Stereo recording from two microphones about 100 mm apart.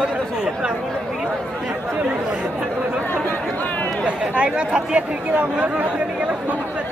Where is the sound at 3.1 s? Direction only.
20° left (ahead or behind).